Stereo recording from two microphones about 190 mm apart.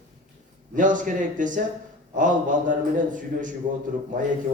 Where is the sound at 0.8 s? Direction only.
45° right (ahead or behind).